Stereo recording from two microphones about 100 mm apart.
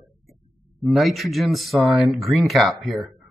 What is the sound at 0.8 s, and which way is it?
Speech, centre (ahead or behind).